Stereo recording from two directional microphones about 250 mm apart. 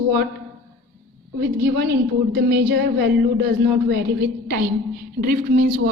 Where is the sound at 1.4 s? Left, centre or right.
Right.